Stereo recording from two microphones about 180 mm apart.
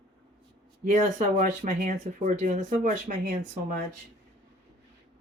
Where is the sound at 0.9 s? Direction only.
40° right (ahead or behind).